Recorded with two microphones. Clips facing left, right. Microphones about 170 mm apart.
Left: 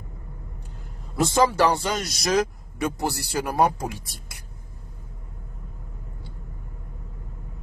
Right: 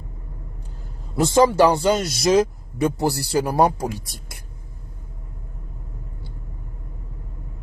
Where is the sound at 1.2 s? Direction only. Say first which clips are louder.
Right 5 dB; 30° right (ahead or behind); by 4.4 s 50° right (ahead or behind).